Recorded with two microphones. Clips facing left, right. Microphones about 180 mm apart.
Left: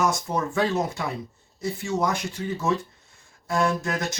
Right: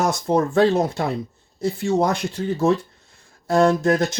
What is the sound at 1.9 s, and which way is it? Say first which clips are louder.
Speech: right 3 dB; 30° right (ahead or behind).